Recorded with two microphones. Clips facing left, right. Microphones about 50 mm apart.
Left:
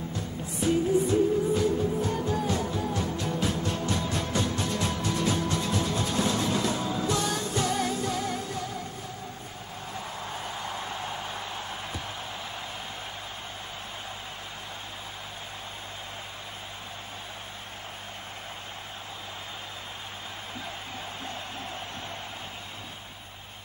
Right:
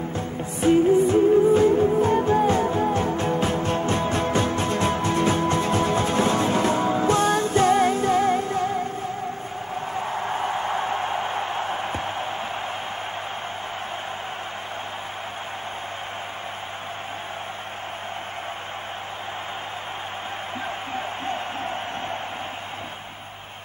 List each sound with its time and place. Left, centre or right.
0.1 s music: right
9.9 s a sound: right
20.9 s music: right